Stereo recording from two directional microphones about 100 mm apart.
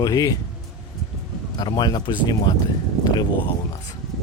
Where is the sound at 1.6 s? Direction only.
45° left (ahead or behind).